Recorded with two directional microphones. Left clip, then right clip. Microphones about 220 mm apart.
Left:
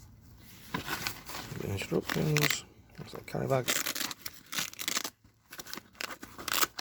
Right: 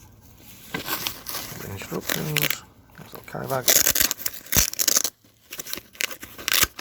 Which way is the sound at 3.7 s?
15° right (ahead or behind).